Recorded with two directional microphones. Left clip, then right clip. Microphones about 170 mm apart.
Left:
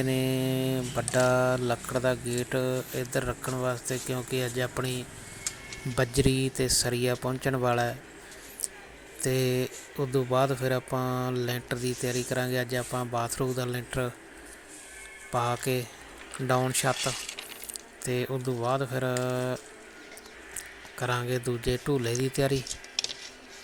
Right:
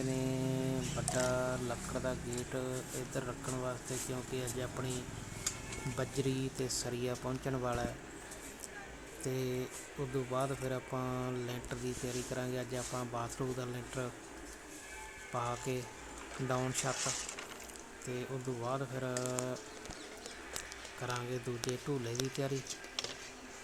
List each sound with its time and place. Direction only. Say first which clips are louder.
0.1 s speech: left 9 dB; 30° left (ahead or behind)
6.0 s speech: left 11 dB; 30° left (ahead or behind)
9.2 s speech: left 11 dB; 30° left (ahead or behind)
15.3 s speech: left 10 dB; 30° left (ahead or behind)
18.0 s speech: left 11 dB; 35° left (ahead or behind)
21.0 s speech: left 10 dB; 30° left (ahead or behind)